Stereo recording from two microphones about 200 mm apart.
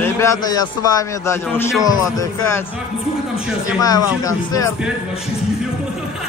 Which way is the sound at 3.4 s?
5° right (ahead or behind).